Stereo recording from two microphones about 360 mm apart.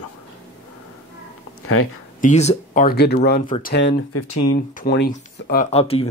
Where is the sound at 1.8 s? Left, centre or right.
Left.